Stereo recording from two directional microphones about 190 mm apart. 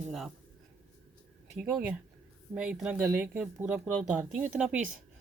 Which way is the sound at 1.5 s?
5° right (ahead or behind).